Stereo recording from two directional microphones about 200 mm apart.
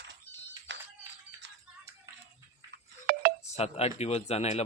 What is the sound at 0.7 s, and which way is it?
Music, 60° right (ahead or behind).